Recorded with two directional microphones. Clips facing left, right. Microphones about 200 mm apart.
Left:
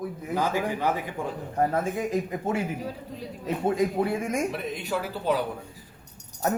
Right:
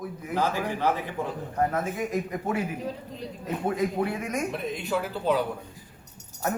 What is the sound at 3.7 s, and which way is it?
Speech, 30° left (ahead or behind).